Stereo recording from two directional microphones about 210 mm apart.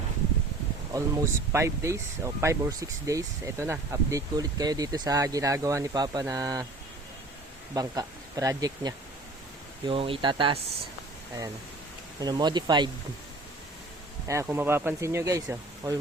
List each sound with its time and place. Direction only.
0.9 s speech: 15° right (ahead or behind)
7.7 s speech: 15° right (ahead or behind)
12.2 s speech: 20° right (ahead or behind)
14.3 s speech: 10° right (ahead or behind)